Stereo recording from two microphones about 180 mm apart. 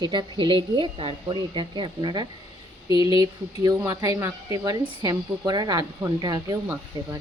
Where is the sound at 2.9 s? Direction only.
30° left (ahead or behind).